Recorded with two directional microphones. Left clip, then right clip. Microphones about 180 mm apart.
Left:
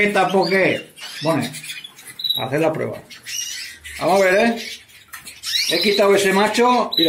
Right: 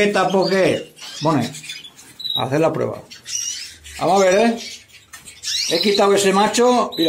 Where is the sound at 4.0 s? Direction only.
10° right (ahead or behind).